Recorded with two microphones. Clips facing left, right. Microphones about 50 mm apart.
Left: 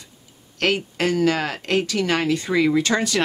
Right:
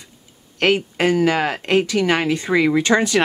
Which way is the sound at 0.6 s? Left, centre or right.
Right.